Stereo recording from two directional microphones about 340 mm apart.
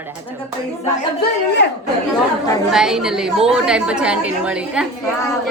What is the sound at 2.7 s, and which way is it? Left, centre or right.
A woman's voice, centre.